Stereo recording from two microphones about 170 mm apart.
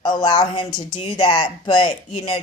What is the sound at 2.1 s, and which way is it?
Speech, 40° left (ahead or behind).